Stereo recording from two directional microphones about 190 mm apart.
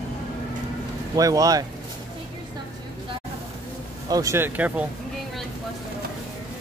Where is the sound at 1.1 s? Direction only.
20° right (ahead or behind).